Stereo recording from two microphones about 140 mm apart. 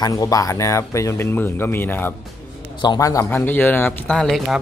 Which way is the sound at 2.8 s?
30° left (ahead or behind).